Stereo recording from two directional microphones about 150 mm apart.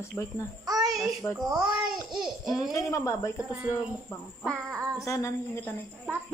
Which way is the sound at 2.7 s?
20° left (ahead or behind).